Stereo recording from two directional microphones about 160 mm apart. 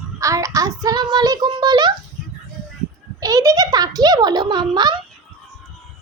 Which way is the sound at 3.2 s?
20° right (ahead or behind).